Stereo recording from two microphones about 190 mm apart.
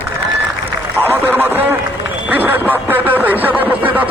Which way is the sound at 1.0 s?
10° right (ahead or behind).